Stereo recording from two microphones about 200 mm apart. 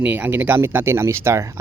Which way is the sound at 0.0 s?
10° right (ahead or behind).